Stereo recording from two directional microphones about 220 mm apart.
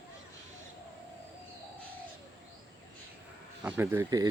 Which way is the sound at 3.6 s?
10° right (ahead or behind).